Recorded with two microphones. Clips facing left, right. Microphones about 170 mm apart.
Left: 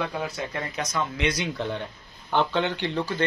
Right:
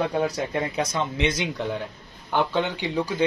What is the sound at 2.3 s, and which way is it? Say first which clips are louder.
Speech: even; 10° right (ahead or behind).